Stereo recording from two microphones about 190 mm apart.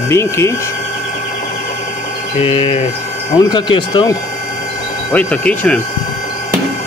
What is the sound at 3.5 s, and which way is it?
Speech, 25° left (ahead or behind).